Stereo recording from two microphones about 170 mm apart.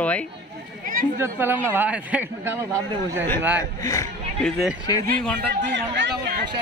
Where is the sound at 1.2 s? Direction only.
15° right (ahead or behind).